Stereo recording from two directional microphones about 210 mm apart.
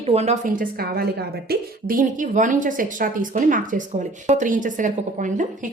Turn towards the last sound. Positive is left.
turn(degrees=-35)  # may be behind; listen again after turning